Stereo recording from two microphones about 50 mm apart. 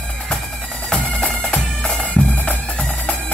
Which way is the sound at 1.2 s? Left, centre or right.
Left.